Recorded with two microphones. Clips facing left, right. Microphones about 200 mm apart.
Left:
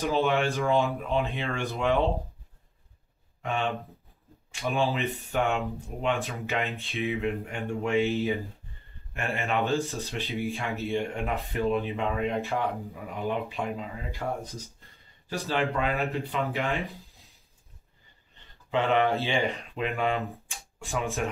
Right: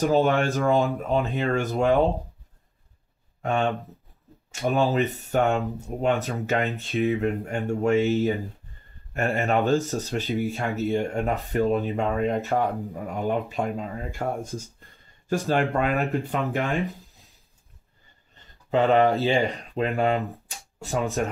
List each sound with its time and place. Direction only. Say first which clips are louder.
0.0 s speech: right 5 dB; 50° right (ahead or behind)
3.4 s speech: right 5 dB; 45° right (ahead or behind)
18.7 s speech: right 5 dB; 40° right (ahead or behind)
20.4 s a sound: right 5 dB; 40° right (ahead or behind)